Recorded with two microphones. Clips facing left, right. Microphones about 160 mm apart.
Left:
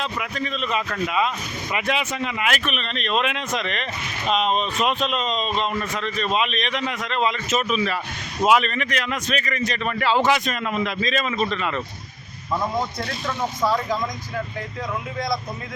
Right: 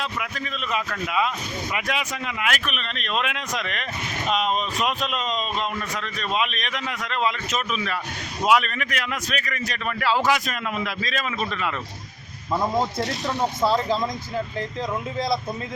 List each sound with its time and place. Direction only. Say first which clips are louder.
0.0 s a man's voice: left 3 dB; centre (ahead or behind)
12.7 s speech: right 2 dB; 20° right (ahead or behind)